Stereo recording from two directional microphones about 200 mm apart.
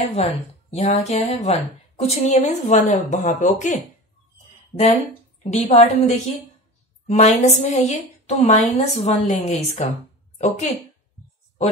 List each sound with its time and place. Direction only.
0.0 s a woman's voice: 30° left (ahead or behind)
5.4 s a woman's voice: 35° left (ahead or behind)